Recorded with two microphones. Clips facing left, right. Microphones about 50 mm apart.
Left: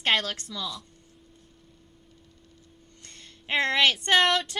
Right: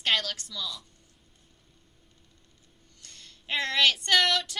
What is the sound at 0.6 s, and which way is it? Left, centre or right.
Speech, centre.